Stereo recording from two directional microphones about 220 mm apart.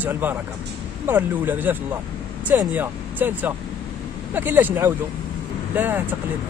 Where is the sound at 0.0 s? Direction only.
10° right (ahead or behind).